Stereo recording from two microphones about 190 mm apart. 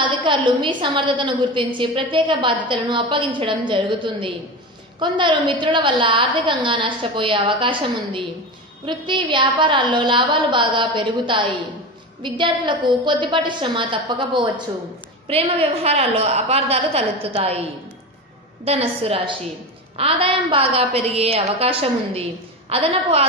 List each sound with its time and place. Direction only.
0.0 s a woman's voice: 25° right (ahead or behind)
18.6 s a woman's voice: 30° right (ahead or behind)